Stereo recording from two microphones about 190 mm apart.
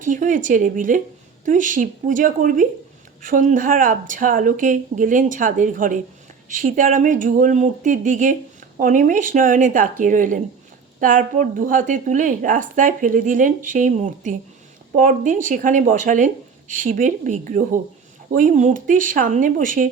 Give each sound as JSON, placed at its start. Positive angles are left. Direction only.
{"t": 0.0, "sound": "a woman's voice", "side_deg": -45}